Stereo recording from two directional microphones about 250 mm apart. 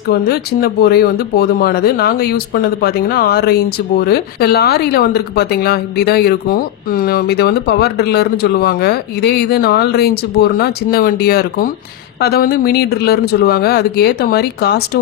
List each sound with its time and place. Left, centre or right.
0.1 s speech: left